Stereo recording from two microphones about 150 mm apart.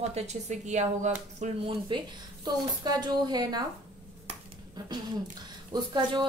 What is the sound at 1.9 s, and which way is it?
A woman's voice, 35° right (ahead or behind).